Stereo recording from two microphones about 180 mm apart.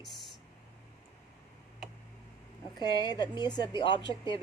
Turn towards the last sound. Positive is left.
turn(degrees=25)  # may be behind; listen again after turning